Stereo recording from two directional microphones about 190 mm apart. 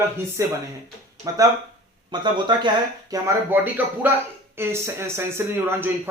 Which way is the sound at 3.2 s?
10° right (ahead or behind).